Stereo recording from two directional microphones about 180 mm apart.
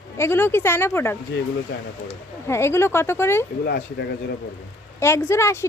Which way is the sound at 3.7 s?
65° left (ahead or behind).